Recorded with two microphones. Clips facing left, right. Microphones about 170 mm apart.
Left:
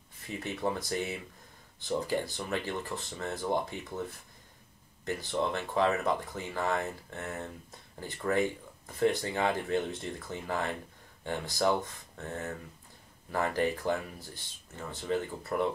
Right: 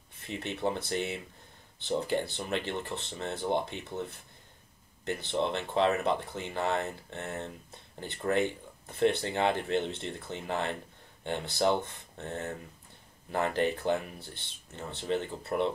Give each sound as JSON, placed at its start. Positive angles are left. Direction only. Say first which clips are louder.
{"t": 0.3, "sound": "speech", "louder": "right 1 dB", "side_deg": -25}
{"t": 5.3, "sound": "speech", "louder": "right 1 dB", "side_deg": -25}
{"t": 15.0, "sound": "speech", "louder": "even", "side_deg": -25}